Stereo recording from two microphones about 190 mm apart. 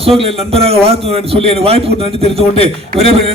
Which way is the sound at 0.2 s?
30° right (ahead or behind).